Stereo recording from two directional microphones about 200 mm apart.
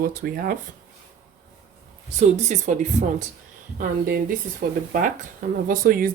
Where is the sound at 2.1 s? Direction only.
35° right (ahead or behind).